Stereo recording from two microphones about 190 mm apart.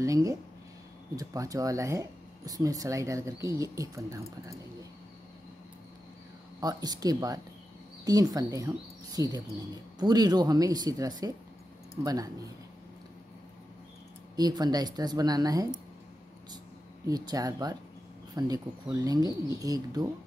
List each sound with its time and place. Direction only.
0.0 s speech: 15° right (ahead or behind)
6.6 s speech: 20° right (ahead or behind)
14.3 s speech: 20° right (ahead or behind)
17.1 s speech: 20° right (ahead or behind)